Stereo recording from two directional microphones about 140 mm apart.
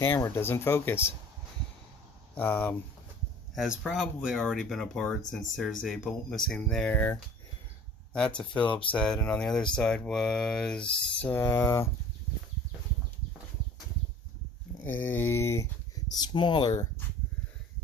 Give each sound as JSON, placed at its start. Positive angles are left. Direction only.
{"t": 0.0, "sound": "speech", "side_deg": 15}
{"t": 2.3, "sound": "speech", "side_deg": 15}
{"t": 3.5, "sound": "speech", "side_deg": 0}
{"t": 14.8, "sound": "speech", "side_deg": 15}
{"t": 16.1, "sound": "speech", "side_deg": 30}